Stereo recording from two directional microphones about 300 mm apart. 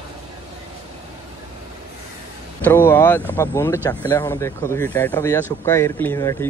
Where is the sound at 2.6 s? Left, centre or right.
Centre.